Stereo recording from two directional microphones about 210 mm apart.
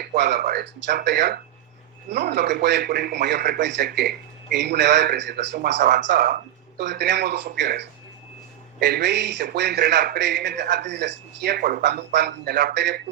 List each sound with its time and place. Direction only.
0.0 s a man's voice: 50° right (ahead or behind)